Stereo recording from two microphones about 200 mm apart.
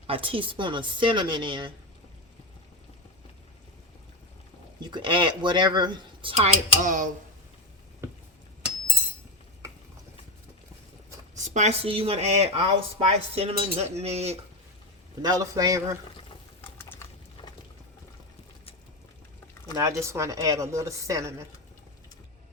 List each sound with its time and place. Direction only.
0.1 s speech: 25° right (ahead or behind)
4.8 s speech: 20° right (ahead or behind); by 7.1 s 40° right (ahead or behind)
11.3 s a woman's voice: 35° right (ahead or behind)
15.2 s a woman's voice: 20° right (ahead or behind)
16.9 s a sound: 15° left (ahead or behind)
19.7 s a woman's voice: 15° right (ahead or behind)